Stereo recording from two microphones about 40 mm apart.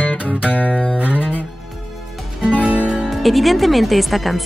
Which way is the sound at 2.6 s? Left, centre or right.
Right.